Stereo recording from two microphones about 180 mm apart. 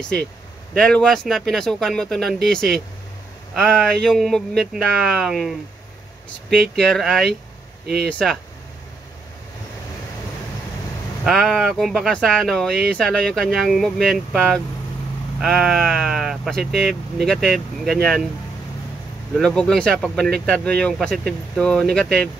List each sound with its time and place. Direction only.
0.0 s speech: 5° left (ahead or behind)
11.2 s speech: centre (ahead or behind)
19.3 s speech: 5° left (ahead or behind)